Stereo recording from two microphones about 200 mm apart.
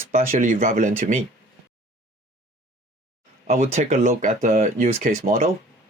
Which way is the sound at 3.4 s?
35° right (ahead or behind).